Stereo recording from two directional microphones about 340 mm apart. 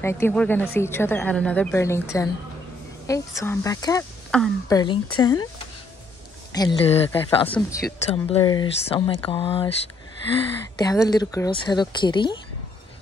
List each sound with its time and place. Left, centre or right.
0.0 s a woman's voice: centre
6.5 s a woman's voice: centre
8.1 s a woman's voice: centre
10.8 s a woman's voice: centre